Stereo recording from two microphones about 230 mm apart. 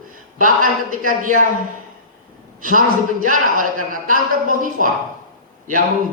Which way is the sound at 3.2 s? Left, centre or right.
Right.